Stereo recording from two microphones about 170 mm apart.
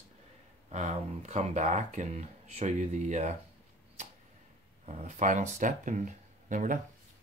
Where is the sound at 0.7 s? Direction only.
45° right (ahead or behind).